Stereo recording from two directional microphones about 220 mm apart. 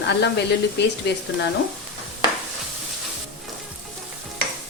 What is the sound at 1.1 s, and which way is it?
Speech, 50° left (ahead or behind).